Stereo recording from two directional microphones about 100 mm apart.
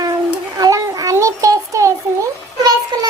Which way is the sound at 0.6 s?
35° right (ahead or behind).